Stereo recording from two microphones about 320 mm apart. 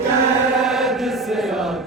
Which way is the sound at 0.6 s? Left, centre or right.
Centre.